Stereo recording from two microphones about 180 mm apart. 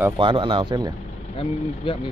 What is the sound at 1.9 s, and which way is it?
Speech, 30° left (ahead or behind).